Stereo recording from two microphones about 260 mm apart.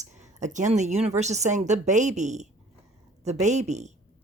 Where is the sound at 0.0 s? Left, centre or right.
Right.